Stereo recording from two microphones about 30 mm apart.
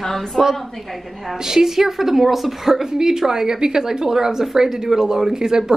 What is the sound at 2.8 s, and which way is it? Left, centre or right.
A woman's voice, right.